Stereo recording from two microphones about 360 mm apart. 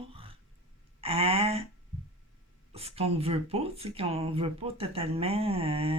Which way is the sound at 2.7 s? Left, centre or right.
Centre.